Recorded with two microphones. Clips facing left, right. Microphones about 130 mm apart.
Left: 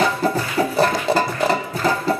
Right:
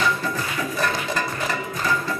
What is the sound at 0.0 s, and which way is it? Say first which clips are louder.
Music: left 5 dB; 30° left (ahead or behind).